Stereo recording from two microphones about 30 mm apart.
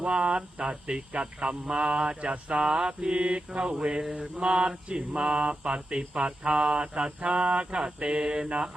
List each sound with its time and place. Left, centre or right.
0.1 s mantra: right